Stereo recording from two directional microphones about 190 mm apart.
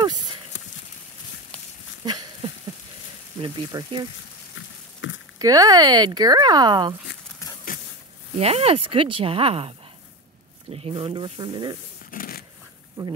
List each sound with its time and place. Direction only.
0.5 s clip-clop: 70° left (ahead or behind)
3.3 s speech: 25° right (ahead or behind)
4.6 s a sound: 85° left
5.4 s speech: 20° right (ahead or behind)
8.4 s speech: 30° right (ahead or behind)
12.1 s shuffling cards: 50° left (ahead or behind)
13.0 s a sound: 20° right (ahead or behind)